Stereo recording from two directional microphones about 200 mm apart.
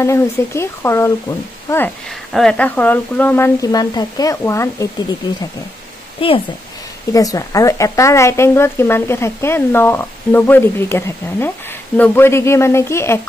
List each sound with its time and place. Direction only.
0.0 s speech: 15° left (ahead or behind)
2.0 s speech: centre (ahead or behind)
6.2 s speech: 25° left (ahead or behind)